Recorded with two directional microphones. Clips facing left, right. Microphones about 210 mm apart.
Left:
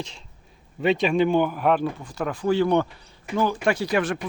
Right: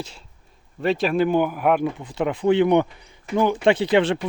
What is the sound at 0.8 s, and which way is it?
Speech, centre (ahead or behind).